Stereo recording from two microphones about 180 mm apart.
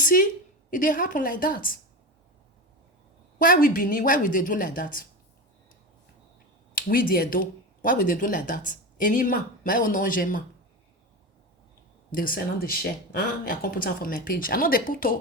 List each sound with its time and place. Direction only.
0.0 s a woman's voice: 50° left (ahead or behind)
3.3 s speech: 50° left (ahead or behind)
6.7 s speech: 55° left (ahead or behind)
12.1 s speech: 50° left (ahead or behind)